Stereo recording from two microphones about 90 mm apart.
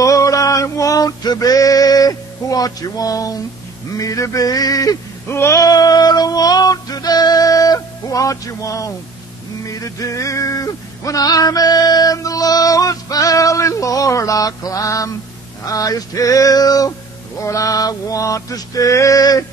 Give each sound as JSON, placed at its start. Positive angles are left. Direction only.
{"t": 0.0, "sound": "male singing", "side_deg": 35}
{"t": 3.9, "sound": "music", "side_deg": 40}
{"t": 5.3, "sound": "music", "side_deg": 30}
{"t": 5.7, "sound": "music", "side_deg": 45}